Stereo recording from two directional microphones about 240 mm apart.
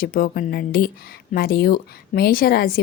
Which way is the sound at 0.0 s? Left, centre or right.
Left.